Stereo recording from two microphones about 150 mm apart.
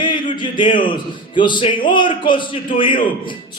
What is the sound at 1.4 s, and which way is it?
A man's voice, 30° left (ahead or behind).